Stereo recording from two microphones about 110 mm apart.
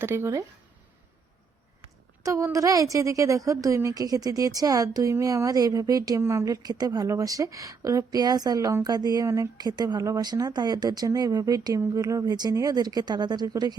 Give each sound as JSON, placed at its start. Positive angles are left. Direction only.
{"t": 0.0, "sound": "speech", "side_deg": -20}
{"t": 2.2, "sound": "a woman's voice", "side_deg": -30}